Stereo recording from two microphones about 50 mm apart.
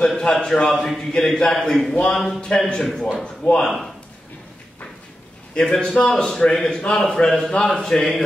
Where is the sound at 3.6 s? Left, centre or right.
Centre.